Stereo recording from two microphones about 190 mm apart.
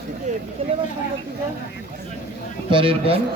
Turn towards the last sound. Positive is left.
turn(degrees=-30)  # may be behind; listen again after turning